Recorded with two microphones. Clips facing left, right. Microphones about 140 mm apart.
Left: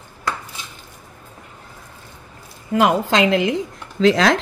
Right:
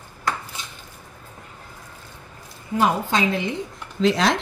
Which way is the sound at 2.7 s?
90° left.